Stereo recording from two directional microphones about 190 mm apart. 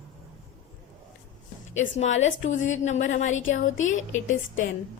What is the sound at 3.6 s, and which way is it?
Speech, 90° left.